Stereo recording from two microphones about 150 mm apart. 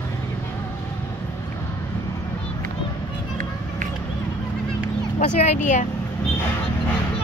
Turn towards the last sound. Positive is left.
turn(degrees=55)  # may be behind; listen again after turning